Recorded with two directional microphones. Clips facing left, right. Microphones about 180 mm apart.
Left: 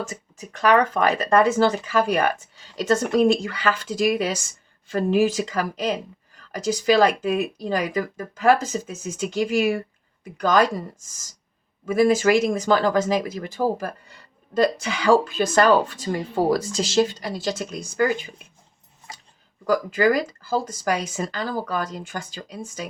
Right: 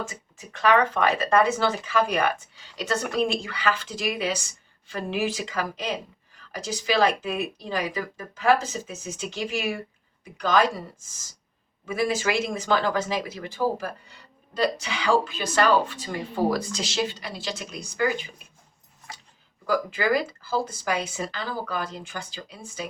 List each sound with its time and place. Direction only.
0.1 s speech: 45° left (ahead or behind)
11.9 s speech: 45° left (ahead or behind)
19.6 s speech: 45° left (ahead or behind)